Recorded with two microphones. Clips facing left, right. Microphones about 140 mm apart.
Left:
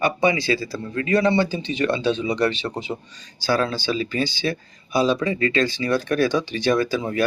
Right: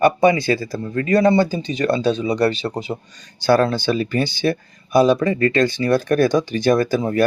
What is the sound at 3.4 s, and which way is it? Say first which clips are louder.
Speech: right 6 dB; 55° right (ahead or behind).